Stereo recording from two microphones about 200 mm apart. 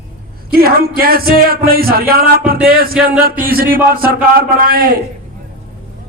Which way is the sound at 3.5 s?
45° right (ahead or behind).